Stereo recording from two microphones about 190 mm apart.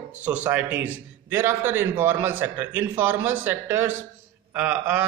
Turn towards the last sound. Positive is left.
turn(degrees=-5)  # may be behind; listen again after turning